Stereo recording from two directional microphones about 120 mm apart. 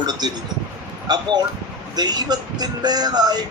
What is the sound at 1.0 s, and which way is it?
Speech, 35° right (ahead or behind).